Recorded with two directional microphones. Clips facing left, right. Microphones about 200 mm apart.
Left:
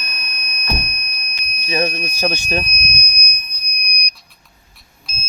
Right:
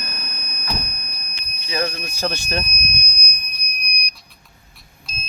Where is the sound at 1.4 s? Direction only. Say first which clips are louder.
Left 4 dB; 20° left (ahead or behind).